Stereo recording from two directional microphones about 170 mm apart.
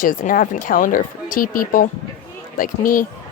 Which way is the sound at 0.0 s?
55° left (ahead or behind).